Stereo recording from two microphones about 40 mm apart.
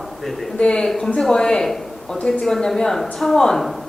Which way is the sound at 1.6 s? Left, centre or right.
Centre.